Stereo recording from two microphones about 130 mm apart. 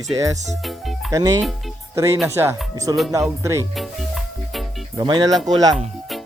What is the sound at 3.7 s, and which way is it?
Music, centre (ahead or behind).